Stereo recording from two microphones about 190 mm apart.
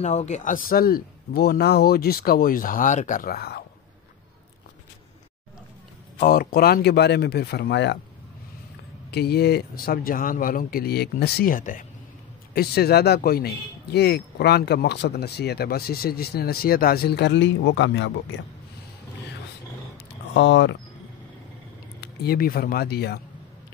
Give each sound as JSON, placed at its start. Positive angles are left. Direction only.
{"t": 0.0, "sound": "a man's voice", "side_deg": 35}
{"t": 6.1, "sound": "speech", "side_deg": 50}
{"t": 9.1, "sound": "a man's voice", "side_deg": 55}
{"t": 12.5, "sound": "speech", "side_deg": 55}
{"t": 20.3, "sound": "speech", "side_deg": 75}
{"t": 22.0, "sound": "speech", "side_deg": 55}